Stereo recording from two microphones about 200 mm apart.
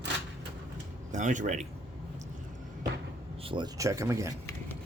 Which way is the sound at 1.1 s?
40° right (ahead or behind).